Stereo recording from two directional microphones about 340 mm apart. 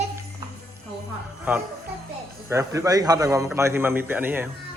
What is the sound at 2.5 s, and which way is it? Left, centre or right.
A man's voice, centre.